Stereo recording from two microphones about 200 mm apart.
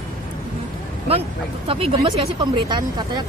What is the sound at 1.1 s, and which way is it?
Speech, 30° right (ahead or behind).